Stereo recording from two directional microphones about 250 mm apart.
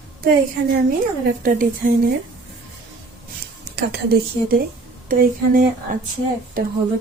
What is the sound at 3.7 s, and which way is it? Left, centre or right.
A woman's voice, right.